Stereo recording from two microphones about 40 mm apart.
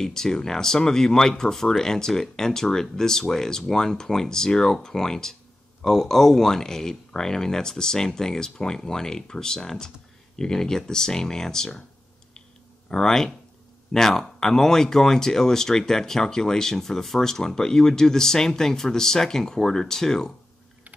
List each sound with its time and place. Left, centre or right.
0.0 s speech: centre
12.9 s speech: centre